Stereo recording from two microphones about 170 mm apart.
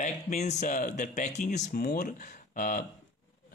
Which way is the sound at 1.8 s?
55° left (ahead or behind).